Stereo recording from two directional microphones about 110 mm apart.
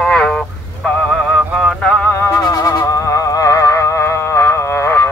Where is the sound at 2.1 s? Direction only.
30° left (ahead or behind).